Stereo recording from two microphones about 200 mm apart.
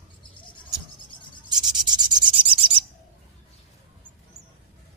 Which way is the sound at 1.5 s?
20° right (ahead or behind).